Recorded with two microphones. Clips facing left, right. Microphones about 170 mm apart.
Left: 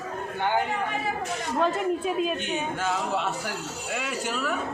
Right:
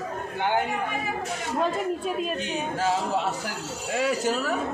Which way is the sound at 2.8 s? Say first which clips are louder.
Right 5 dB; 35° right (ahead or behind).